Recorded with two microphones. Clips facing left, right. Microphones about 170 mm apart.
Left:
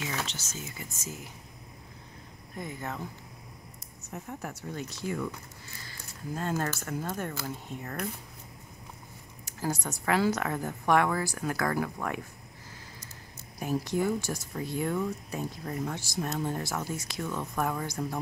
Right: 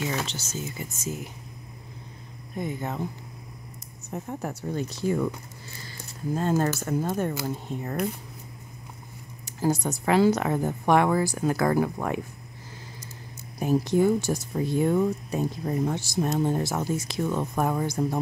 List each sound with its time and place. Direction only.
0.3 s speech: 30° right (ahead or behind)
2.5 s speech: 20° right (ahead or behind)
4.1 s speech: 30° right (ahead or behind)
5.9 s a sound: 25° right (ahead or behind)
6.8 s speech: 25° right (ahead or behind)
9.5 s speech: 25° right (ahead or behind)
13.6 s speech: 25° right (ahead or behind)